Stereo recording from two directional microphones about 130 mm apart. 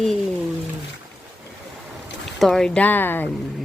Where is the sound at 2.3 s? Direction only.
5° left (ahead or behind).